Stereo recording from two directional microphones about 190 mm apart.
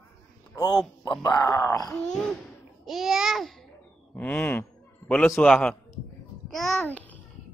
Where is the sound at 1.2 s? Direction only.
15° left (ahead or behind).